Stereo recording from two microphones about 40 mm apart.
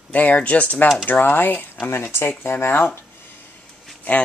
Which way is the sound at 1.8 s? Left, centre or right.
Left.